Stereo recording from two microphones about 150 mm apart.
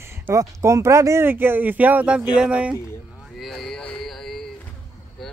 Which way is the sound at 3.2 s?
Centre (ahead or behind).